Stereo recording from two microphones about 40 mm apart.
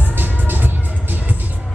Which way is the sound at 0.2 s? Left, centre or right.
Right.